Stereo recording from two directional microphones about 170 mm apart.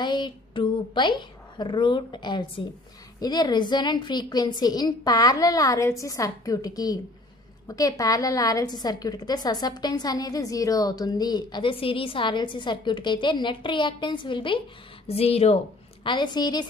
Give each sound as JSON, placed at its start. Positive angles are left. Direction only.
{"t": 0.0, "sound": "a woman's voice", "side_deg": 25}